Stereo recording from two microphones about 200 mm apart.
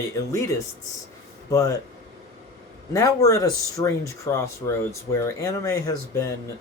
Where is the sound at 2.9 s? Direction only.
15° left (ahead or behind).